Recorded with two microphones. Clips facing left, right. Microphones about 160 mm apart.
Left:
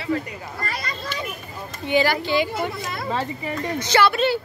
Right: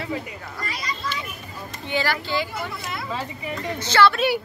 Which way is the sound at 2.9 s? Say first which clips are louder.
Left 4 dB; 45° left (ahead or behind).